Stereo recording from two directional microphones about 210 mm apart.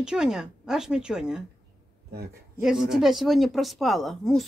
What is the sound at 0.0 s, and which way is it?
Speech, 5° right (ahead or behind).